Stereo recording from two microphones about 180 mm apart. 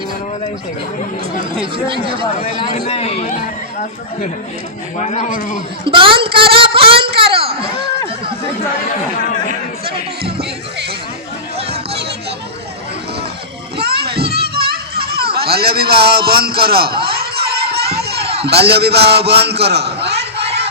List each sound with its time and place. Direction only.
1.9 s a woman's voice: 30° right (ahead or behind)
2.2 s speech: 30° left (ahead or behind)
4.9 s speech: 40° left (ahead or behind)
5.8 s a woman's voice: 30° right (ahead or behind)
6.5 s a sound: 30° right (ahead or behind)
9.5 s music: 60° right (ahead or behind)
13.7 s children playing: 65° right (ahead or behind)